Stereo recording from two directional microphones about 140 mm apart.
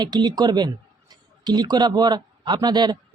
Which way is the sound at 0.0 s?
30° right (ahead or behind).